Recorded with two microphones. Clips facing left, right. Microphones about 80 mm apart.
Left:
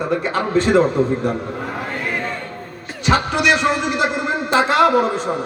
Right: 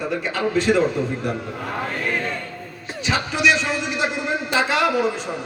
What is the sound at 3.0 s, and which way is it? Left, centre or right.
Speech, left.